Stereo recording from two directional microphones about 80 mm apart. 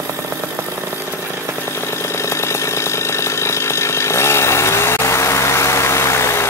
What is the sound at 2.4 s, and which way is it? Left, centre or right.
Chainsaw, left.